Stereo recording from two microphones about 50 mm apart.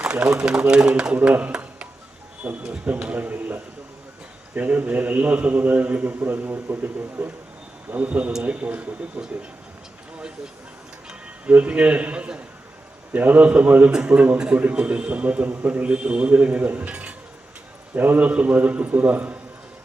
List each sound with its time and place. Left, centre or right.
0.0 s a man's voice: right
7.9 s a man's voice: right
10.2 s a sound: centre
11.5 s a man's voice: right
14.5 s a man's voice: right